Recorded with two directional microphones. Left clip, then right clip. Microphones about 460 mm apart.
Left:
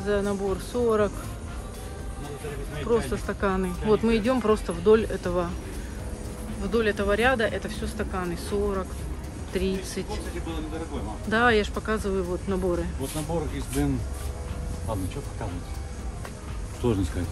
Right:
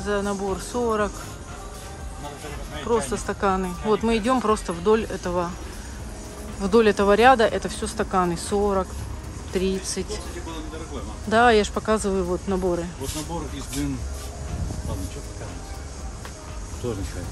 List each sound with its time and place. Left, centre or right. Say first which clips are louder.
0.0 s speech: right 1 dB; centre
2.9 s speech: right 2 dB; centre
6.6 s speech: right 7 dB; centre
11.2 s speech: right 5 dB; centre